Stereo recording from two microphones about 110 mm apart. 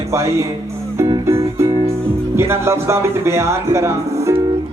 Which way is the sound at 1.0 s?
25° right (ahead or behind).